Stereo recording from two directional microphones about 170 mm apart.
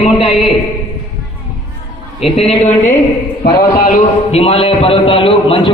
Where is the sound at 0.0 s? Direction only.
35° left (ahead or behind).